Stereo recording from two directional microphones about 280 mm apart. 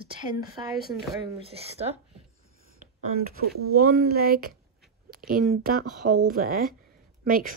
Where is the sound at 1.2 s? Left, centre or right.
Centre.